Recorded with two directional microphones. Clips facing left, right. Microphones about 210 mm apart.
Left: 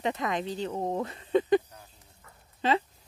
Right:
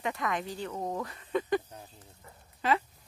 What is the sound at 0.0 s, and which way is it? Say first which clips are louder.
Speech: left 3 dB; 20° left (ahead or behind).